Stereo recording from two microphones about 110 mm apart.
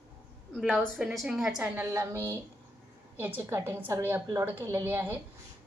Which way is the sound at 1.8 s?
25° right (ahead or behind).